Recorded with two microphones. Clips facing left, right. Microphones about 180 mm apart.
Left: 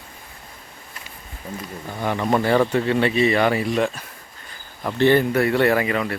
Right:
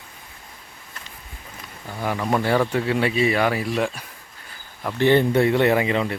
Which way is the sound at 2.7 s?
5° right (ahead or behind).